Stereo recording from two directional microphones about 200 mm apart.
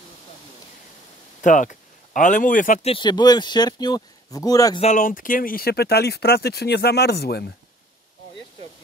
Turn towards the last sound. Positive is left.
turn(degrees=55)  # may be behind; listen again after turning